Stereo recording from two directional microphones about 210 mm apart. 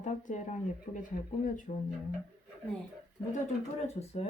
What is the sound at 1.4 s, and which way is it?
Speech, 40° left (ahead or behind).